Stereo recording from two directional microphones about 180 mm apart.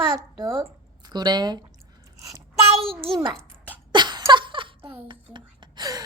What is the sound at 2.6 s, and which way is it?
Child singing, 30° right (ahead or behind).